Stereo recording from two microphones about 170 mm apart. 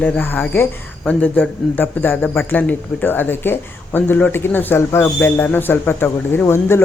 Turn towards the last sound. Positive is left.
turn(degrees=15)  # may be behind; listen again after turning